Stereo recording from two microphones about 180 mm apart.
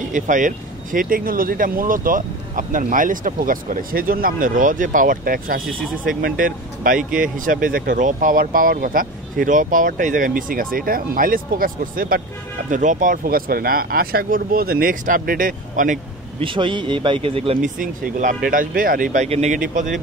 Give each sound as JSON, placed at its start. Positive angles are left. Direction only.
{"t": 0.1, "sound": "speech", "side_deg": -45}
{"t": 16.3, "sound": "speech", "side_deg": -30}
{"t": 17.6, "sound": "speech", "side_deg": -45}
{"t": 19.2, "sound": "speech", "side_deg": -35}